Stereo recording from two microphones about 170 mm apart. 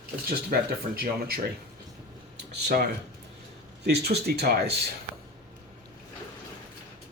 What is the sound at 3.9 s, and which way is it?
Speech, 70° right (ahead or behind).